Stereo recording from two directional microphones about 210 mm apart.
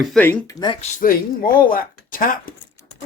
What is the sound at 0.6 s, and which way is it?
Speech, 25° left (ahead or behind).